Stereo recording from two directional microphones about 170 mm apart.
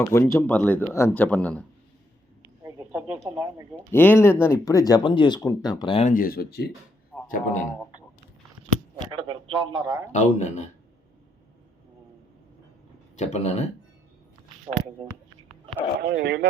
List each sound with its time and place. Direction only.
0.0 s speech: 15° left (ahead or behind)
2.6 s a sound: 15° right (ahead or behind)
3.2 s a man's voice: 20° right (ahead or behind)
3.8 s speech: 10° left (ahead or behind); by 6.1 s 35° left (ahead or behind)
6.1 s speech: 60° left (ahead or behind)
7.3 s a man's voice: 55° left (ahead or behind)
9.0 s a man's voice: 30° right (ahead or behind)
10.1 s a man's voice: 45° left (ahead or behind)
13.1 s speech: 40° left (ahead or behind)
16.0 s speech: 80° right